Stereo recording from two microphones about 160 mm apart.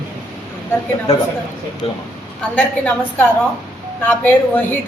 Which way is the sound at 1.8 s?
35° left (ahead or behind).